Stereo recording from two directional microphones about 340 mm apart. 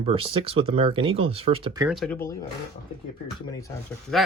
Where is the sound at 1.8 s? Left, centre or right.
Centre.